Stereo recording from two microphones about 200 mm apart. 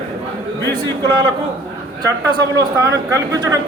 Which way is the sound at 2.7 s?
15° right (ahead or behind).